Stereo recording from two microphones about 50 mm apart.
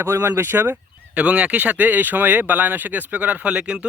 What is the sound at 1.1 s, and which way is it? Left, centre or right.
Speech, right.